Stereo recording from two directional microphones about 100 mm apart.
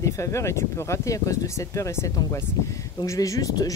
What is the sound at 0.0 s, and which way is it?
Speech, 30° left (ahead or behind).